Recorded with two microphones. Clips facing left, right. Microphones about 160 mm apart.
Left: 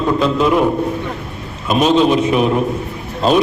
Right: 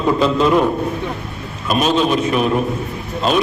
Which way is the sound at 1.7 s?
20° left (ahead or behind).